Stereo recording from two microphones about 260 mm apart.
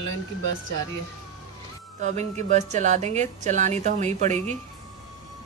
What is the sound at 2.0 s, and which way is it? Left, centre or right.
A woman's voice, right.